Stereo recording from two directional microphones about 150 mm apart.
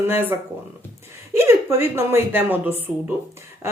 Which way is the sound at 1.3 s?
15° right (ahead or behind).